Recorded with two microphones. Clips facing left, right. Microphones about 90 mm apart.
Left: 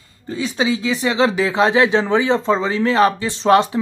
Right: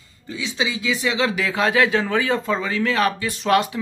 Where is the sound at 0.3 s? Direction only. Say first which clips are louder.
Left 6 dB; 40° left (ahead or behind).